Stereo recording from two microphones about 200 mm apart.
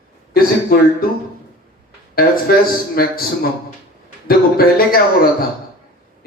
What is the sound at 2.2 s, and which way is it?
A man's voice, 50° left (ahead or behind).